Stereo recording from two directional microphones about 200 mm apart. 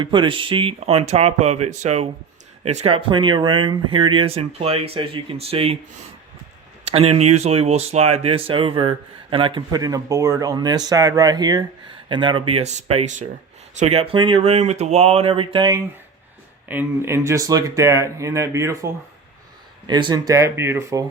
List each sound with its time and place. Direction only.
0.0 s speech: 25° right (ahead or behind)
6.8 s speech: 30° right (ahead or behind)
16.6 s speech: 10° right (ahead or behind)
19.9 s speech: 20° right (ahead or behind)